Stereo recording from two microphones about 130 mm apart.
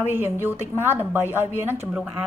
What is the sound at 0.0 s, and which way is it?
A woman's voice, 15° right (ahead or behind).